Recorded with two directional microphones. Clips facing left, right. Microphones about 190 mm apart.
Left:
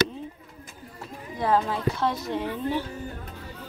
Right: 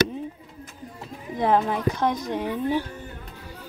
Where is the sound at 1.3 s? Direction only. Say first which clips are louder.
Right 3 dB; 20° right (ahead or behind).